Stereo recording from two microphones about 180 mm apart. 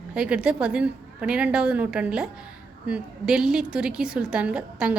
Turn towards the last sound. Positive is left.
turn(degrees=-5)  # may be behind; listen again after turning